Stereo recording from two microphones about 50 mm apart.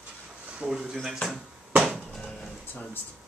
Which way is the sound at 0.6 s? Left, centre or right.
Centre.